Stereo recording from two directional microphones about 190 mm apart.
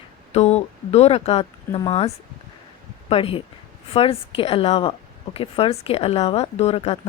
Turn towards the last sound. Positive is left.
turn(degrees=30)  # may be behind; listen again after turning